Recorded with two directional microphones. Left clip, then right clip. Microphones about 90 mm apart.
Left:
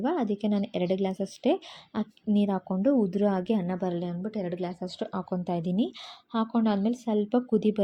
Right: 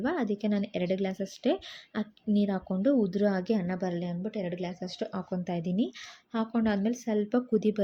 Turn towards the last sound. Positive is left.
turn(degrees=30)  # may be behind; listen again after turning